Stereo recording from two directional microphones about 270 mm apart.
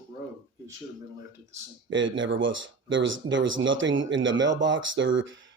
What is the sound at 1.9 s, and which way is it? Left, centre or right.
Speech, right.